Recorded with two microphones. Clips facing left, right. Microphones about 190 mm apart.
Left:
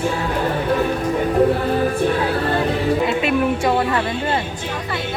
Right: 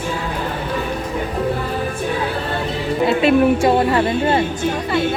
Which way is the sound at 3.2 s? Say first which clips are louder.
Right 5 dB; 30° right (ahead or behind).